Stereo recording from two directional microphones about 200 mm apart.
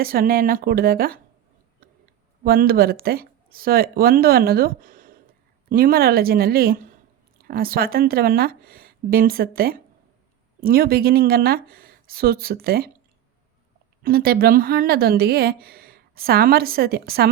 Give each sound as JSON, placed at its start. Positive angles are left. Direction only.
{"t": 0.0, "sound": "speech", "side_deg": -45}
{"t": 2.4, "sound": "speech", "side_deg": -50}
{"t": 14.0, "sound": "speech", "side_deg": -50}